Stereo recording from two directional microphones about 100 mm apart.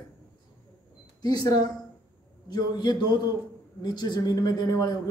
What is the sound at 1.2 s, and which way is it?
Speech, 40° left (ahead or behind).